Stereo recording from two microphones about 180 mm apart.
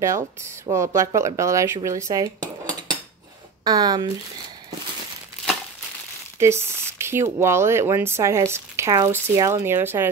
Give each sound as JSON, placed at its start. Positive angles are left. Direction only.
{"t": 0.7, "sound": "speech", "side_deg": -20}
{"t": 6.4, "sound": "speech", "side_deg": -15}